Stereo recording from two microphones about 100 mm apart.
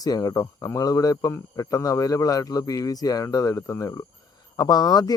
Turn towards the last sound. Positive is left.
turn(degrees=40)  # may be behind; listen again after turning